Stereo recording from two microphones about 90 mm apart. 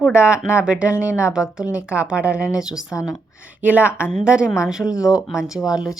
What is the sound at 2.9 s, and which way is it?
Speech, 35° left (ahead or behind).